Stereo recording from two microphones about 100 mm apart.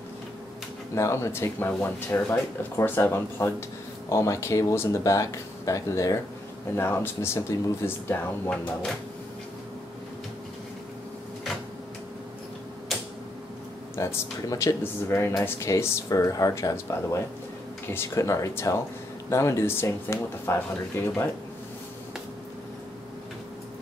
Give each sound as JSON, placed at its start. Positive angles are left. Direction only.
{"t": 0.9, "sound": "speech", "side_deg": 30}
{"t": 6.7, "sound": "speech", "side_deg": 20}
{"t": 13.9, "sound": "speech", "side_deg": 25}